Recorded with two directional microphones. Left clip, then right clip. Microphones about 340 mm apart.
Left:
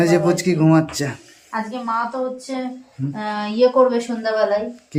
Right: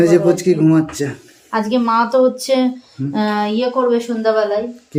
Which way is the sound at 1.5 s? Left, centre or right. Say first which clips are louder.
Right 7 dB; right.